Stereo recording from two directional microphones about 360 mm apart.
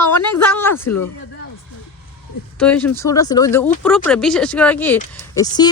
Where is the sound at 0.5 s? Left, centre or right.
Centre.